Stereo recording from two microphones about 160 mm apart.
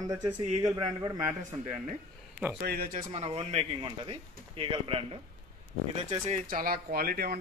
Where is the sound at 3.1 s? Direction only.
40° right (ahead or behind).